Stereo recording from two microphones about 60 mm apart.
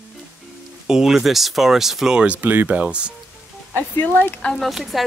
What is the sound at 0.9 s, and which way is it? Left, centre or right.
Speech, centre.